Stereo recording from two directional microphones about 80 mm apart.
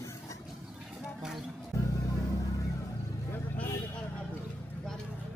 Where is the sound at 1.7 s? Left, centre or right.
Left.